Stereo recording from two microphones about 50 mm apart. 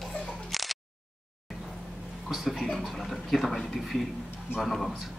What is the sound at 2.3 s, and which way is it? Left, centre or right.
A man's voice, centre.